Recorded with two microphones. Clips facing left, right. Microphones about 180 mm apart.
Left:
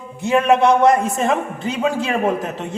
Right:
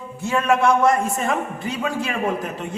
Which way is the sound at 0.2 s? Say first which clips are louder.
Left 4 dB; 20° left (ahead or behind).